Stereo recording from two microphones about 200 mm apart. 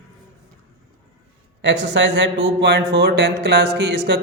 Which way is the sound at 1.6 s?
60° right (ahead or behind).